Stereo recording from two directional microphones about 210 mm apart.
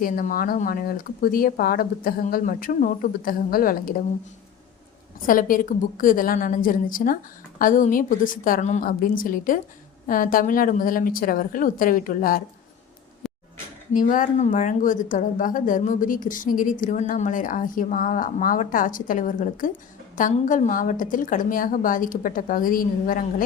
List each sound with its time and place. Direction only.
0.0 s speech: 40° left (ahead or behind)
5.2 s a woman's voice: 40° left (ahead or behind)
13.2 s a sound: centre (ahead or behind)
13.9 s a woman's voice: 40° left (ahead or behind)